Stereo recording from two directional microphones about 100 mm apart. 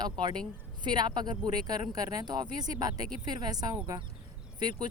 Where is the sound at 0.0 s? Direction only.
45° right (ahead or behind).